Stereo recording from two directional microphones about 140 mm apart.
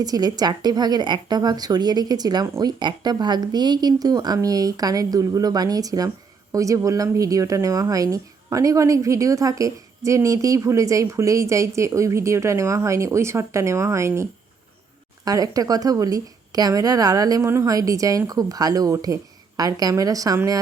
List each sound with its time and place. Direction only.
0.0 s a woman's voice: 25° right (ahead or behind)